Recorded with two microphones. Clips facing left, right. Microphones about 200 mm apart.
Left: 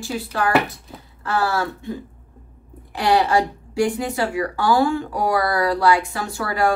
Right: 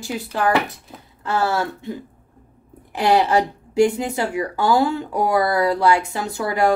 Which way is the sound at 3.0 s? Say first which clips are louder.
Right 1 dB; 20° right (ahead or behind).